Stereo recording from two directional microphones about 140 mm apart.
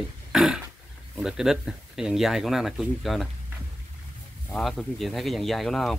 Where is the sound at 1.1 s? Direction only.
5° right (ahead or behind).